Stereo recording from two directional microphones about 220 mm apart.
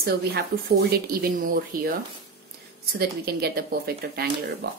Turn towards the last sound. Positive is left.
turn(degrees=-45)  # may be behind; listen again after turning